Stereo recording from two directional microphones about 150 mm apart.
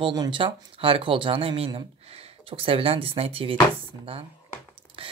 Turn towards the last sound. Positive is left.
turn(degrees=-35)  # may be behind; listen again after turning